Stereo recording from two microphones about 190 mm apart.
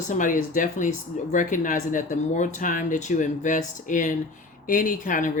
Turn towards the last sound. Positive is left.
turn(degrees=45)  # may be behind; listen again after turning